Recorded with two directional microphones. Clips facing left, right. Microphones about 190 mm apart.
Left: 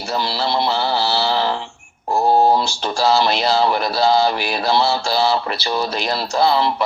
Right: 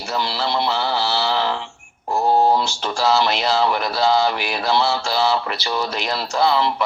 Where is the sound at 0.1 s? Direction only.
35° left (ahead or behind).